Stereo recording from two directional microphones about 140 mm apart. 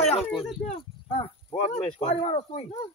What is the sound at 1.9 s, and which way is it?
Speech, 50° left (ahead or behind).